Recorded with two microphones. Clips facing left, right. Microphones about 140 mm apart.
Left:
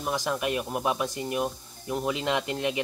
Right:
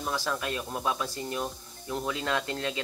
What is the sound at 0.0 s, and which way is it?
Speech, 15° left (ahead or behind).